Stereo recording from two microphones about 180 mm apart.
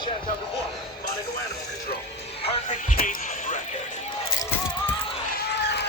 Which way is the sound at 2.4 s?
35° left (ahead or behind).